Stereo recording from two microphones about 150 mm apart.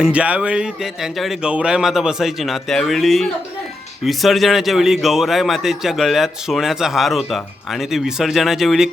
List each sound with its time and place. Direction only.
0.0 s a man's voice: 10° right (ahead or behind)